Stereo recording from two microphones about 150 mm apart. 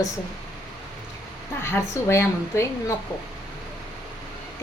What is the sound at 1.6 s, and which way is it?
A woman's voice, 15° left (ahead or behind).